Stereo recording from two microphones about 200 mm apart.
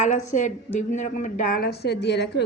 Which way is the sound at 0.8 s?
35° left (ahead or behind).